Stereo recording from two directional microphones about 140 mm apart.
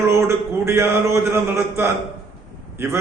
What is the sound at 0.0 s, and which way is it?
A man's voice, 20° right (ahead or behind).